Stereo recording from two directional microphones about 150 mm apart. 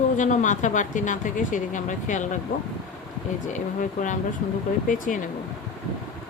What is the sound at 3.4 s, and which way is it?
Speech, 55° left (ahead or behind).